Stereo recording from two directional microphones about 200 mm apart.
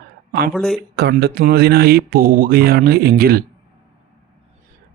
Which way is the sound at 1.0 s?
55° right (ahead or behind).